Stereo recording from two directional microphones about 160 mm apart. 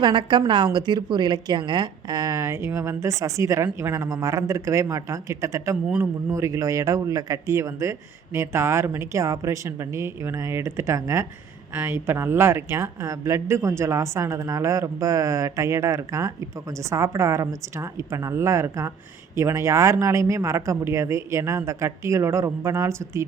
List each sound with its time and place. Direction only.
0.0 s a woman's voice: 30° right (ahead or behind)